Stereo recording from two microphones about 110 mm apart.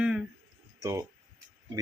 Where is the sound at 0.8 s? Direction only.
30° right (ahead or behind).